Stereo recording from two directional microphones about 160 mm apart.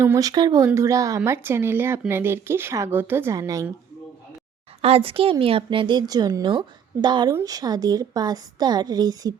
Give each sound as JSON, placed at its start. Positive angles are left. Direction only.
{"t": 0.0, "sound": "speech", "side_deg": -20}
{"t": 4.8, "sound": "a woman's voice", "side_deg": -35}